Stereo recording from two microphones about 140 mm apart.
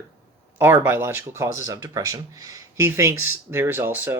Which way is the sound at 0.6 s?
15° right (ahead or behind).